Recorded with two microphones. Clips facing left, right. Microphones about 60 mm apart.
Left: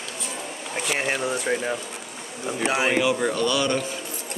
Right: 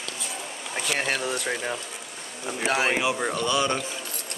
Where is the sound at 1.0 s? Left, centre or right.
Right.